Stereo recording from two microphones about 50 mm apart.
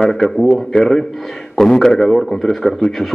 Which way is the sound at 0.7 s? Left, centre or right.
Left.